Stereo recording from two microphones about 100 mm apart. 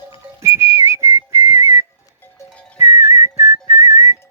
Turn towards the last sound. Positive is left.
turn(degrees=-30)  # may be behind; listen again after turning